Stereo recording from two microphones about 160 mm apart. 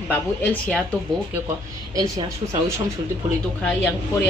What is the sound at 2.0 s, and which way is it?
Speech, 25° right (ahead or behind).